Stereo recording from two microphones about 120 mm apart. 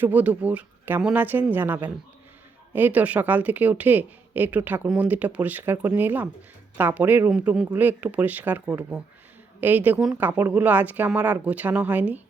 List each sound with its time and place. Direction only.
0.0 s a man's voice: 15° right (ahead or behind)